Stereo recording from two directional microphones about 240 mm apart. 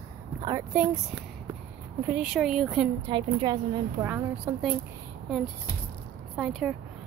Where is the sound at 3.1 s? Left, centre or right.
Centre.